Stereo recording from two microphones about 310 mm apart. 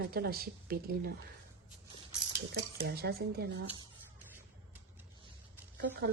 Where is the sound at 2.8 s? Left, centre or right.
Right.